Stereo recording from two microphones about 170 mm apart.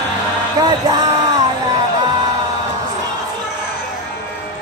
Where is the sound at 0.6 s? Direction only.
25° right (ahead or behind).